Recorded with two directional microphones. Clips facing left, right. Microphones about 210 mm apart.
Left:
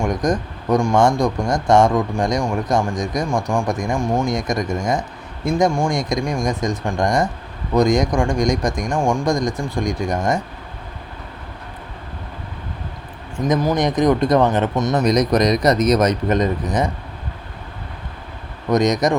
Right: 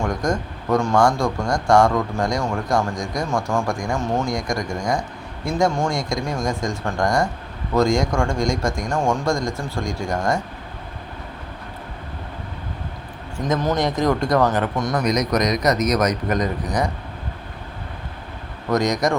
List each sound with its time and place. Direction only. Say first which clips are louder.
0.0 s speech: left 3 dB; 20° left (ahead or behind)
13.4 s speech: left 3 dB; 10° left (ahead or behind); by 16.5 s 25° left (ahead or behind)
18.7 s speech: left 3 dB; 20° left (ahead or behind)